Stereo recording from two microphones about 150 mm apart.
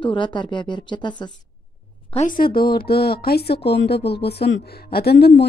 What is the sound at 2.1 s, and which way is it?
Speech, 65° left (ahead or behind).